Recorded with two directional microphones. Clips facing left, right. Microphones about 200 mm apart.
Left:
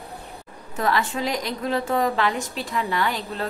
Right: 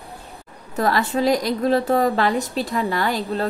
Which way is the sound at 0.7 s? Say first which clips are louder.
Right 4 dB; 40° right (ahead or behind).